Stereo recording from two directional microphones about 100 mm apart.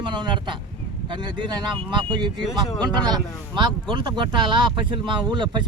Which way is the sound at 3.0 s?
45° right (ahead or behind).